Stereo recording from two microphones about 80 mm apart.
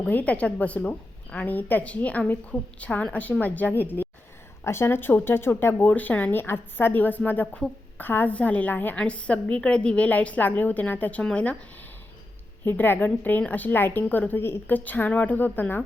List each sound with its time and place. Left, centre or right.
0.0 s a woman's voice: centre
12.6 s a woman's voice: left